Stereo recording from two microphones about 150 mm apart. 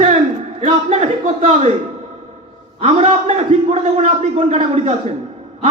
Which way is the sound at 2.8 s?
45° right (ahead or behind).